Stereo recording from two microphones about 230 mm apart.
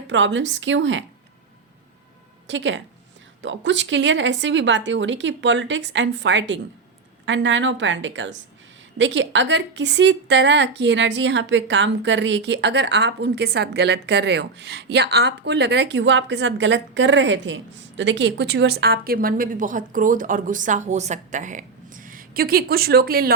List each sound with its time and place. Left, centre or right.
0.1 s a woman's voice: right
2.5 s a woman's voice: right